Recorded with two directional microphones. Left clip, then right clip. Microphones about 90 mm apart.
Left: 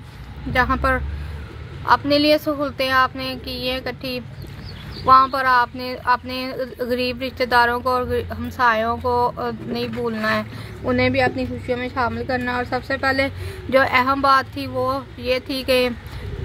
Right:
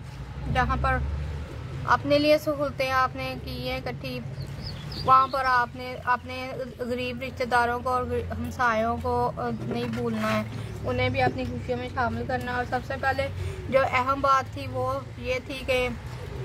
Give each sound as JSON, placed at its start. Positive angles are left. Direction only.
{"t": 0.5, "sound": "a woman's voice", "side_deg": 50}
{"t": 1.9, "sound": "speech", "side_deg": 20}
{"t": 9.8, "sound": "speech", "side_deg": 30}
{"t": 10.9, "sound": "a woman's voice", "side_deg": 65}
{"t": 13.7, "sound": "speech", "side_deg": 30}
{"t": 14.1, "sound": "speech", "side_deg": 20}